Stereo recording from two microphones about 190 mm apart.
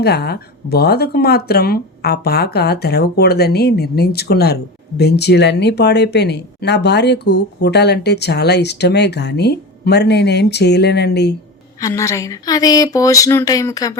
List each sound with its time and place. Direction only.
0.0 s speech: 60° left (ahead or behind)
11.8 s speech: 15° left (ahead or behind)